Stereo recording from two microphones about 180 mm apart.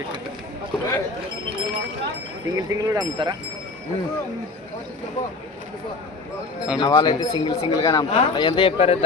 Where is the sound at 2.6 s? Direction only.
20° right (ahead or behind).